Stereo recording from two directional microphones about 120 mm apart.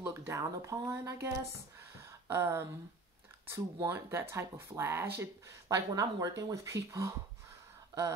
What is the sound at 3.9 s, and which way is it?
Speech, 20° right (ahead or behind).